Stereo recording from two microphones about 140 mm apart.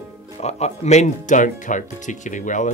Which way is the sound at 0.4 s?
50° left (ahead or behind).